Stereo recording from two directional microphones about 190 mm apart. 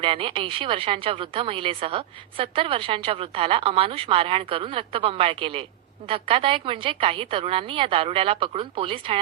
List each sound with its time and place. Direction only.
0.0 s a woman's voice: 30° right (ahead or behind)